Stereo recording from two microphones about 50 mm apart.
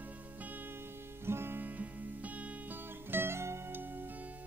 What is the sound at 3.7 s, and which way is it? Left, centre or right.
Music, right.